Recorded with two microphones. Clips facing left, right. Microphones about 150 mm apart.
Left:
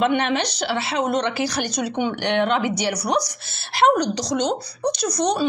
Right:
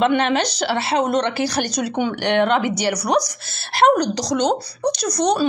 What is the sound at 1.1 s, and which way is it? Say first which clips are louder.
Speech: right 2 dB; 65° right (ahead or behind).